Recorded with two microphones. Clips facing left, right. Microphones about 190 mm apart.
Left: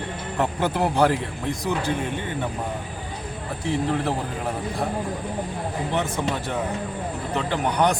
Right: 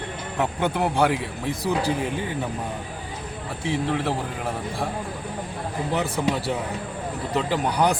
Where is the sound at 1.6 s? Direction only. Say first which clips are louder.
Right 2 dB; 35° right (ahead or behind).